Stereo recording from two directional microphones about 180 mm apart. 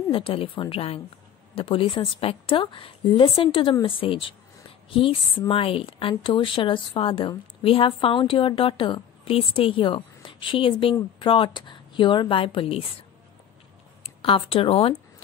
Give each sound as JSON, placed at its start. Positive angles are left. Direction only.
{"t": 0.1, "sound": "a woman's voice", "side_deg": 30}
{"t": 14.0, "sound": "speech", "side_deg": 30}